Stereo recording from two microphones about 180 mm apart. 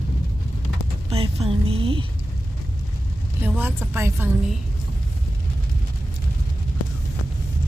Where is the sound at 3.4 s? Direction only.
10° right (ahead or behind).